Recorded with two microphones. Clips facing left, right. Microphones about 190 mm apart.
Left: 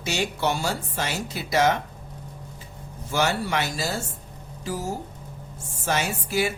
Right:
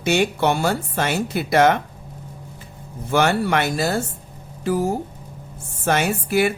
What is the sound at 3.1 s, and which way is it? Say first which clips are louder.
A woman's voice: right 6 dB; 60° right (ahead or behind).